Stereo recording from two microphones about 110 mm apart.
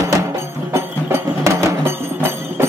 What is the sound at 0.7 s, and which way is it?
Music, 20° right (ahead or behind).